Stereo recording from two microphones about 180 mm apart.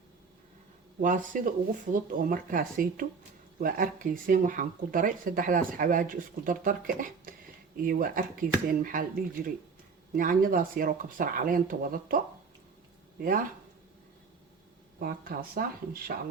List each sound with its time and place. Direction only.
1.0 s speech: 45° right (ahead or behind)
14.9 s speech: 55° right (ahead or behind)